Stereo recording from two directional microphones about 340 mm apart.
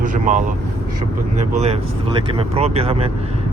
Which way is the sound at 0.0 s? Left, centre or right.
Right.